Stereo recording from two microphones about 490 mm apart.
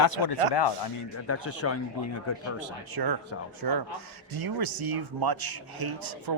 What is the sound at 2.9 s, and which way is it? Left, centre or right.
A man's voice, right.